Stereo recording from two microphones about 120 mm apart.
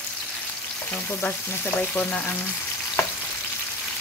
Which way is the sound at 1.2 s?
15° left (ahead or behind).